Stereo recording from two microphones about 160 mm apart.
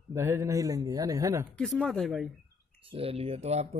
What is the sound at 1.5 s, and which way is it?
Speech, centre (ahead or behind).